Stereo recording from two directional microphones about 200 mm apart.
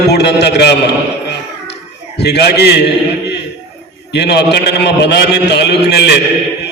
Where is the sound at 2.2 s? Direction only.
55° left (ahead or behind).